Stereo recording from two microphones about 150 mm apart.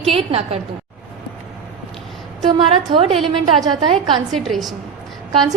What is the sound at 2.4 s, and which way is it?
Speech, 30° right (ahead or behind).